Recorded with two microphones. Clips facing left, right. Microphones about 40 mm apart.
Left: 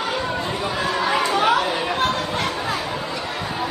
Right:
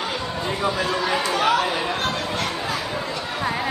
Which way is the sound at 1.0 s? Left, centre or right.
Centre.